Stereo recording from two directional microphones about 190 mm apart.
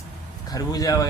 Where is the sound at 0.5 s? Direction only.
20° left (ahead or behind).